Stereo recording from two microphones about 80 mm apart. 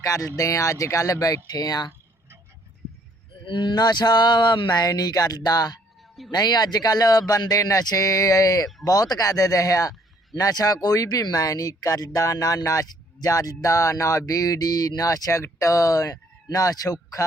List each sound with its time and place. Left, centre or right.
0.0 s speech: left
3.4 s speech: left